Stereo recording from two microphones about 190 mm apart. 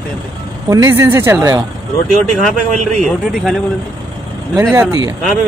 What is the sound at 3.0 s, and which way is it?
Speech, centre (ahead or behind).